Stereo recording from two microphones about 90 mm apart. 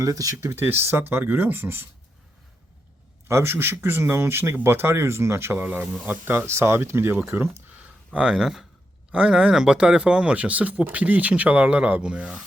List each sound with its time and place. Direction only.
0.0 s speech: 40° right (ahead or behind)
0.5 s speech: 25° right (ahead or behind)
3.2 s speech: 25° right (ahead or behind)
8.1 s speech: 5° right (ahead or behind)